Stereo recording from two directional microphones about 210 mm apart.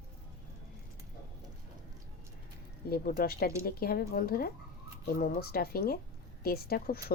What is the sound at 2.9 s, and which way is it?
Speech, 45° left (ahead or behind).